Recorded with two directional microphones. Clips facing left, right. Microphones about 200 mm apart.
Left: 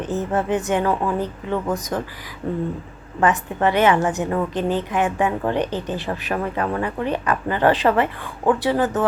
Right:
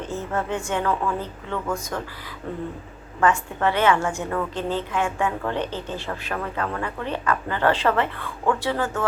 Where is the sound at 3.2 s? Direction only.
20° left (ahead or behind).